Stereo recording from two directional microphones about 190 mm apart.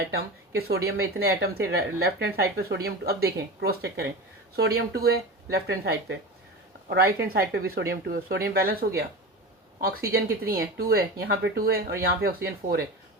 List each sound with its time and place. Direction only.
0.9 s speech: 55° right (ahead or behind)